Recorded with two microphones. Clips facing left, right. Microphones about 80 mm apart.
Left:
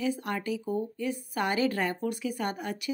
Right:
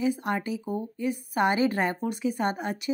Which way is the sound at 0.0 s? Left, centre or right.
Right.